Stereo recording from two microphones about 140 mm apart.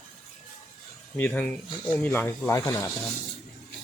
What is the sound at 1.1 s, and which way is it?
Speech, 10° left (ahead or behind).